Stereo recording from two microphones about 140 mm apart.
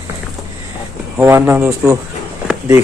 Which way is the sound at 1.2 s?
20° right (ahead or behind).